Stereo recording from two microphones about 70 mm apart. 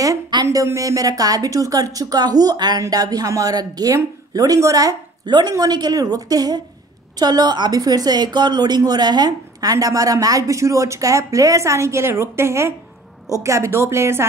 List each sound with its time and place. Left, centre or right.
0.3 s a sound: right
0.7 s a woman's voice: right
2.8 s a woman's voice: right
5.5 s a woman's voice: right